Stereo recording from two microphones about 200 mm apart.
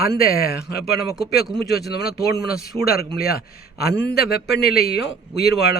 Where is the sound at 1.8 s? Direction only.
55° left (ahead or behind).